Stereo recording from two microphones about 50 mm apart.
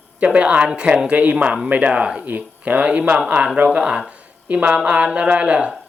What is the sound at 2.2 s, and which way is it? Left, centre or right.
Speech, right.